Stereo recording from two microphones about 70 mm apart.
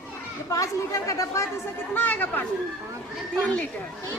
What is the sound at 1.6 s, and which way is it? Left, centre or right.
Speech, left.